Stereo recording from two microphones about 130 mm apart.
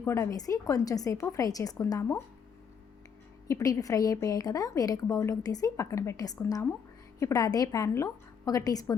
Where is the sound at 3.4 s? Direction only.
25° left (ahead or behind).